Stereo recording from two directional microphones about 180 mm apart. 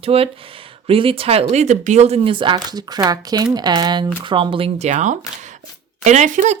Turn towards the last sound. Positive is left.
turn(degrees=-45)  # may be behind; listen again after turning